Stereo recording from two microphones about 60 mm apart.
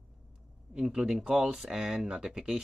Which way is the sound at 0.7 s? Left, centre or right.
Centre.